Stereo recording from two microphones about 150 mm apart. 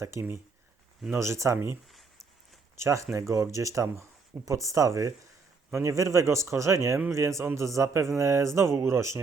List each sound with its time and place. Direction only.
0.0 s speech: 15° right (ahead or behind)